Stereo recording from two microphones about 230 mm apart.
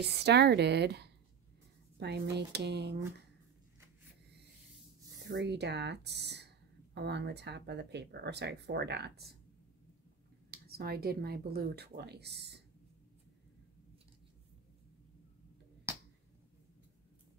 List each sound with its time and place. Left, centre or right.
0.2 s speech: right
5.3 s speech: right
10.5 s speech: right
15.9 s a sound: centre